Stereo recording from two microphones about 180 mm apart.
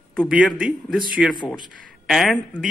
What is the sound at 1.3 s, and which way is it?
Speech, 25° left (ahead or behind).